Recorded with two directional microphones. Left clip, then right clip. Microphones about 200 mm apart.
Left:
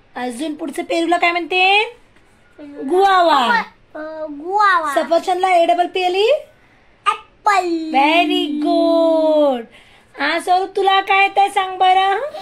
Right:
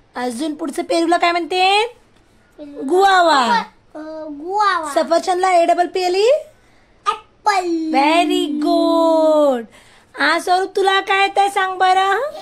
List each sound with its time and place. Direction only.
0.1 s a woman's voice: 15° right (ahead or behind)
4.9 s speech: 20° right (ahead or behind)
7.1 s a child's voice: 10° right (ahead or behind)